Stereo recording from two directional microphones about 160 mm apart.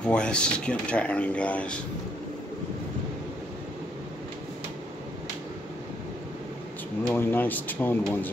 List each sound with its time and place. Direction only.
0.0 s speech: 5° left (ahead or behind)
7.2 s speech: 15° left (ahead or behind)